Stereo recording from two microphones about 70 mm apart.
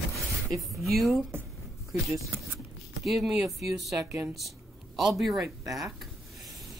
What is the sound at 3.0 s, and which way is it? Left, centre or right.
Speech, centre.